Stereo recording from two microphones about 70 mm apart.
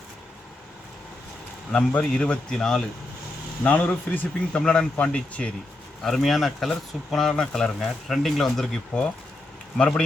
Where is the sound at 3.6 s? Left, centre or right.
Left.